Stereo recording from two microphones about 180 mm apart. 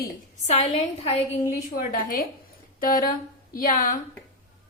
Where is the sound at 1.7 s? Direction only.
55° left (ahead or behind).